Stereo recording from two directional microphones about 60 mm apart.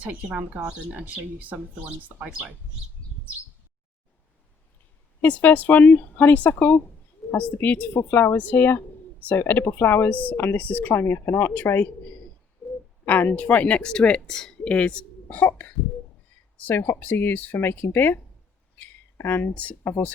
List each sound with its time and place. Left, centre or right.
0.9 s speech: right
5.2 s speech: left
13.1 s speech: left
16.6 s speech: left